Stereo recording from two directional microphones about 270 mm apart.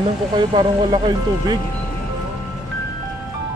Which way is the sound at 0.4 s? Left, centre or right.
Centre.